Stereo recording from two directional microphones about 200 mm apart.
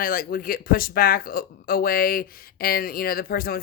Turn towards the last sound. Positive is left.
turn(degrees=50)  # may be behind; listen again after turning